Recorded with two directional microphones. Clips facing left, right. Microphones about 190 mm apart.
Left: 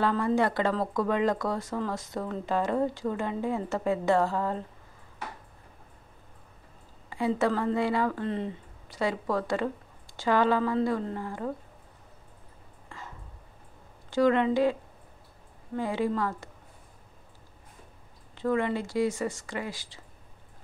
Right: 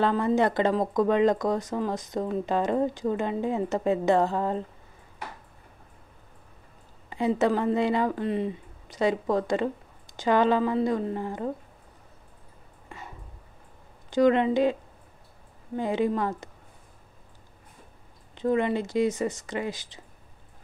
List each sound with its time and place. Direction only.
0.0 s speech: 20° right (ahead or behind)
7.1 s speech: 20° right (ahead or behind)
14.1 s speech: 20° right (ahead or behind)
18.3 s speech: 20° right (ahead or behind)